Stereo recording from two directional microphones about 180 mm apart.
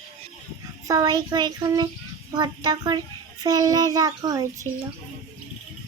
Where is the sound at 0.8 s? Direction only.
20° right (ahead or behind).